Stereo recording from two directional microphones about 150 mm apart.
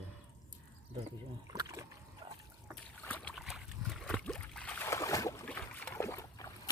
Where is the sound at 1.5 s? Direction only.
25° right (ahead or behind).